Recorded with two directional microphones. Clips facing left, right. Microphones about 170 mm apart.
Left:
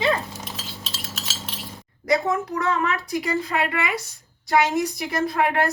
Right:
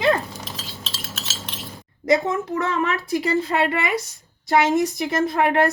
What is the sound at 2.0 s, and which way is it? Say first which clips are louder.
A woman's voice: right 2 dB; 25° right (ahead or behind).